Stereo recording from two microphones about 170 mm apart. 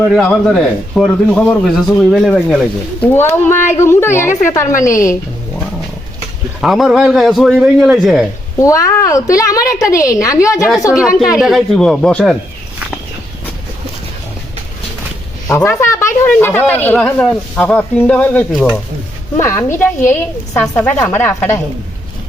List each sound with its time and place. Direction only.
0.1 s speech: 5° left (ahead or behind)
6.6 s speech: centre (ahead or behind)
8.5 s a woman's voice: 20° left (ahead or behind)
11.3 s speech: centre (ahead or behind)
15.4 s speech: 15° left (ahead or behind)